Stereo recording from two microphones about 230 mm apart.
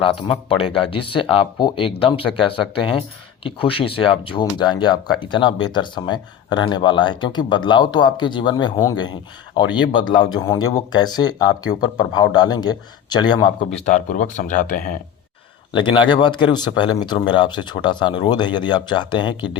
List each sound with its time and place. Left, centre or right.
0.0 s speech: left
13.8 s speech: left
15.7 s speech: left